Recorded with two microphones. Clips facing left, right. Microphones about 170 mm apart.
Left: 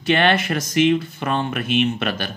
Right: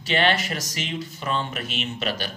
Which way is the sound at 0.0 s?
55° left (ahead or behind).